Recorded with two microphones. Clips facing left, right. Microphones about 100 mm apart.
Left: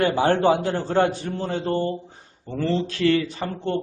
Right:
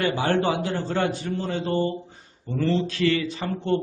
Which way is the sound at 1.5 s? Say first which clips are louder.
Left 2 dB; 50° left (ahead or behind).